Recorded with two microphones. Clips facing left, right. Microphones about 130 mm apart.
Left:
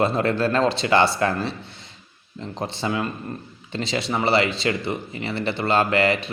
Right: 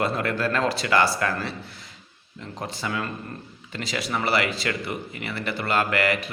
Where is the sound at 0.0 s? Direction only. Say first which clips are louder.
Left 4 dB; 25° left (ahead or behind).